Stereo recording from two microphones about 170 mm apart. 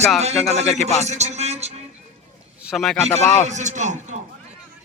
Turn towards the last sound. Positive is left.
turn(degrees=-45)  # may be behind; listen again after turning